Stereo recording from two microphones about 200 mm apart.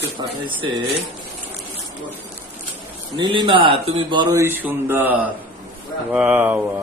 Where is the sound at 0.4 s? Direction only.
25° right (ahead or behind).